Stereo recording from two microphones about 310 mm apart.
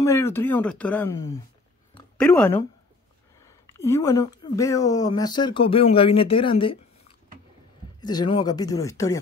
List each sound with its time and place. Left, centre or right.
0.0 s speech: centre
3.7 s speech: centre
6.6 s a sound: centre
8.0 s speech: centre